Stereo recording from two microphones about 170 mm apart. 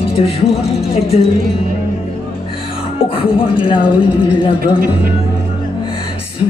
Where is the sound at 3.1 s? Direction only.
30° left (ahead or behind).